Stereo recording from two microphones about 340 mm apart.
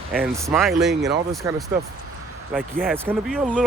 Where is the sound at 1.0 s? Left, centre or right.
Right.